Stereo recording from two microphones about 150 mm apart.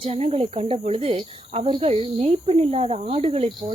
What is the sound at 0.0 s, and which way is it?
Speech, 40° right (ahead or behind).